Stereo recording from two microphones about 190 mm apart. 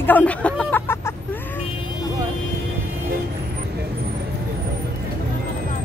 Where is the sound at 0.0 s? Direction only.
10° left (ahead or behind).